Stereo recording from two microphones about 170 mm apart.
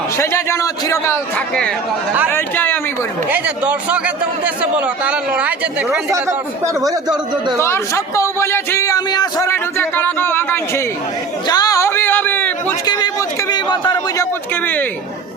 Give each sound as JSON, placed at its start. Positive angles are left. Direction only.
{"t": 0.2, "sound": "a man's voice", "side_deg": 15}
{"t": 2.3, "sound": "chatter", "side_deg": 10}
{"t": 3.2, "sound": "a man's voice", "side_deg": -10}
{"t": 7.6, "sound": "a man's voice", "side_deg": 15}
{"t": 11.4, "sound": "a sound", "side_deg": 25}
{"t": 12.8, "sound": "a sound", "side_deg": 25}